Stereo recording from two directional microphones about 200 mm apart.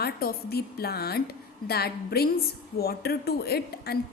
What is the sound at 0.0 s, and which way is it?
A woman's voice, 50° left (ahead or behind).